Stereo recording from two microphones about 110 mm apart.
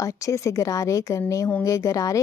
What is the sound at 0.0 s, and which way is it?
Speech, 30° left (ahead or behind).